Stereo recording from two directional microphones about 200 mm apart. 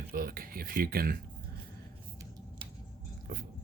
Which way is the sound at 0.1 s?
45° right (ahead or behind).